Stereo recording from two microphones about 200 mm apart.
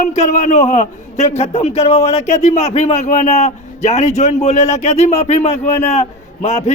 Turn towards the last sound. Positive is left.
turn(degrees=35)  # may be behind; listen again after turning